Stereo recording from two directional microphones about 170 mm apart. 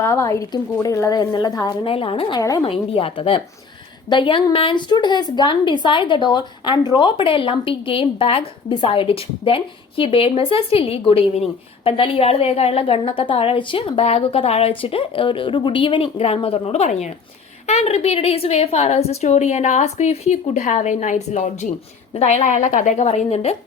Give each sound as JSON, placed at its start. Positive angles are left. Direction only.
{"t": 0.0, "sound": "a woman's voice", "side_deg": 15}
{"t": 2.4, "sound": "a woman's voice", "side_deg": 20}
{"t": 2.6, "sound": "a woman's voice", "side_deg": 35}